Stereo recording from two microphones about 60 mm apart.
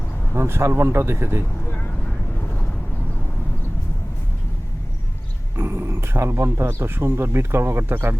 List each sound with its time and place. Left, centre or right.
0.3 s speech: right
5.5 s speech: right